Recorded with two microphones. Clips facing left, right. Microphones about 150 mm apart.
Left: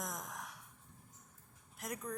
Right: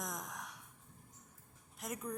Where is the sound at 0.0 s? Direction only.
Centre (ahead or behind).